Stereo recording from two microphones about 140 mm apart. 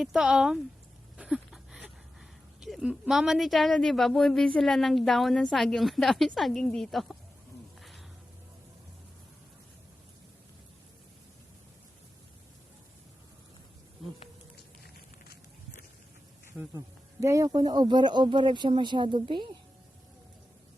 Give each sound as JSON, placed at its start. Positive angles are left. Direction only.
{"t": 0.0, "sound": "speech", "side_deg": -5}
{"t": 1.1, "sound": "a sound", "side_deg": -5}
{"t": 2.6, "sound": "speech", "side_deg": -5}
{"t": 7.8, "sound": "a sound", "side_deg": 0}
{"t": 14.8, "sound": "walk", "side_deg": 90}
{"t": 16.5, "sound": "speech", "side_deg": -20}